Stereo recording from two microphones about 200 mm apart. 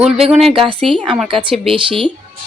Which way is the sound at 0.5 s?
25° right (ahead or behind).